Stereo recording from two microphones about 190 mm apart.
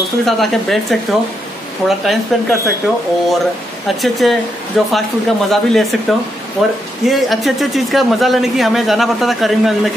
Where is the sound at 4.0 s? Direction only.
Centre (ahead or behind).